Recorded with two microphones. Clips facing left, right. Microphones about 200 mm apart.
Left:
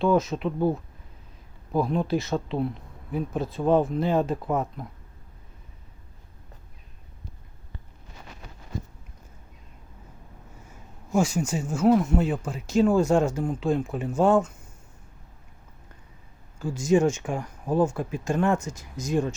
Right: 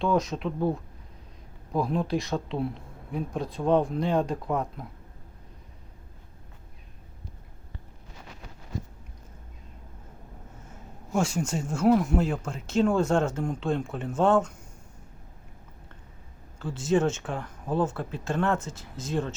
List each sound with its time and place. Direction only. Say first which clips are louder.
0.0 s speech: left 3 dB; centre (ahead or behind)
11.1 s speech: left 3 dB; 5° left (ahead or behind)
16.6 s speech: left 3 dB; 10° left (ahead or behind)